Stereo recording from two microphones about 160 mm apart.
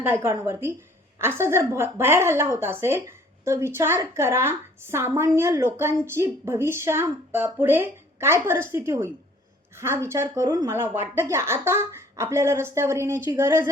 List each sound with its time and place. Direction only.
0.0 s a woman's voice: 15° right (ahead or behind)